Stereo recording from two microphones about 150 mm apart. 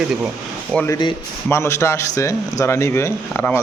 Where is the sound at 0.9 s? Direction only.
30° left (ahead or behind).